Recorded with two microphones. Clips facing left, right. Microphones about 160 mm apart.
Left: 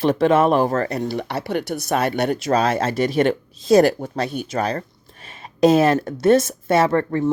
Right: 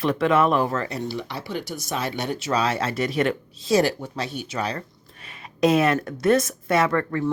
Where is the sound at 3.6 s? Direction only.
50° left (ahead or behind); by 7.3 s 25° left (ahead or behind).